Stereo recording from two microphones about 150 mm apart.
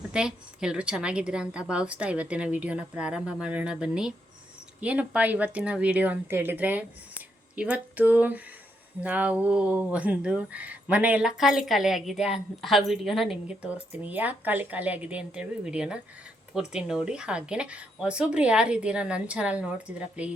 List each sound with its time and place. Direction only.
0.1 s speech: 5° right (ahead or behind)